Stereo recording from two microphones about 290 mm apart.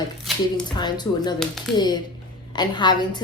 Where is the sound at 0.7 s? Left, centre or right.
Centre.